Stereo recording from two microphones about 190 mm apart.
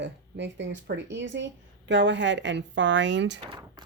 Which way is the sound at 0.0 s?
70° right (ahead or behind).